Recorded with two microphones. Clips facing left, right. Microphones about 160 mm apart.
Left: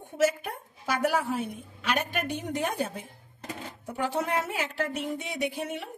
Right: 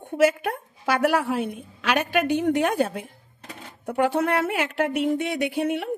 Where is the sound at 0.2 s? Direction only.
70° right (ahead or behind).